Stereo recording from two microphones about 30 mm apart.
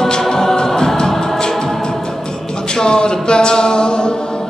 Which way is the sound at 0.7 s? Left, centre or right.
Centre.